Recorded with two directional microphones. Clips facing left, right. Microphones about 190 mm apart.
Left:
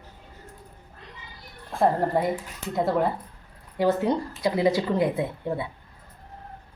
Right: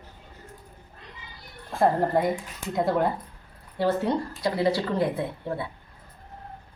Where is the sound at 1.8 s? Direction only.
Centre (ahead or behind).